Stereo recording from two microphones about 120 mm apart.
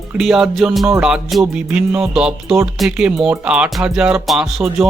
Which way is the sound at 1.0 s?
5° right (ahead or behind).